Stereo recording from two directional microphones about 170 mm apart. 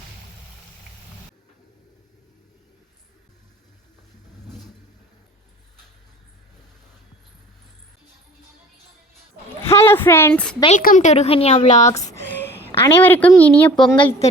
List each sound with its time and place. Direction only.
9.6 s speech: 15° left (ahead or behind)
10.7 s a woman's voice: 50° left (ahead or behind)
12.0 s a sound: 15° left (ahead or behind)
12.8 s speech: 10° left (ahead or behind)
13.9 s speech: 30° left (ahead or behind)